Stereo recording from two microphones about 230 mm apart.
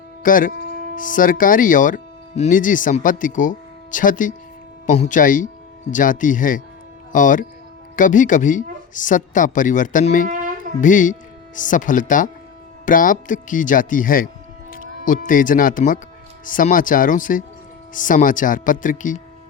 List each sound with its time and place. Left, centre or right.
0.2 s speech: left
10.2 s a sound: right
10.8 s speech: left